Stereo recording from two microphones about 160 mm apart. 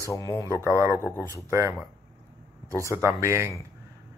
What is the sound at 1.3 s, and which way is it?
Speech, 15° right (ahead or behind).